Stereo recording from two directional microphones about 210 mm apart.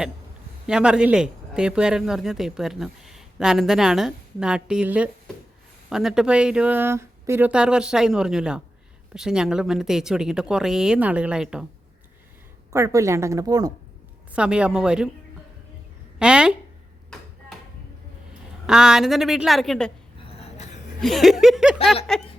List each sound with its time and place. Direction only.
0.7 s speech: 5° right (ahead or behind)
12.7 s a woman's voice: 15° right (ahead or behind)
14.3 s speech: 5° right (ahead or behind)
16.1 s a sound: 5° right (ahead or behind)
18.6 s speech: 5° right (ahead or behind)
20.4 s a sound: 30° left (ahead or behind)
21.0 s speech: centre (ahead or behind)